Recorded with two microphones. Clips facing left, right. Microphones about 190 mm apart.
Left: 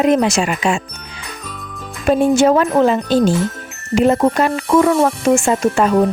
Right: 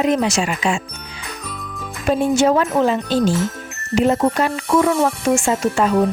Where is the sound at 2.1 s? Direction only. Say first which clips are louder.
Left 3 dB; 55° left (ahead or behind).